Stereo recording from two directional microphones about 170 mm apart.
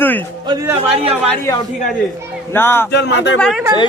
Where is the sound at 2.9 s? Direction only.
85° left.